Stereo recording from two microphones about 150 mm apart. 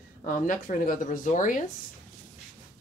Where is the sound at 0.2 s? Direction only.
60° left (ahead or behind).